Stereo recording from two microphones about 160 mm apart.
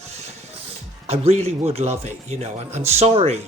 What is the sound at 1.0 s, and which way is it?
A man's voice, 40° right (ahead or behind).